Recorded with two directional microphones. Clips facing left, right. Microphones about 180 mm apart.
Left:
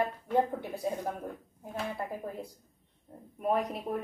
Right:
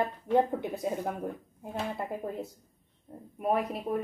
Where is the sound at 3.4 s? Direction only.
5° right (ahead or behind).